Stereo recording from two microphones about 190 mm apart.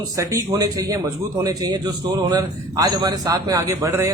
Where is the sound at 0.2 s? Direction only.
15° right (ahead or behind).